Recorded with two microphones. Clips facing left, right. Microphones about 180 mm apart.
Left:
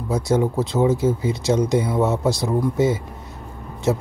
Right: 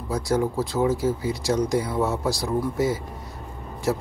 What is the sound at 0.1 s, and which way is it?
Speech, 20° left (ahead or behind).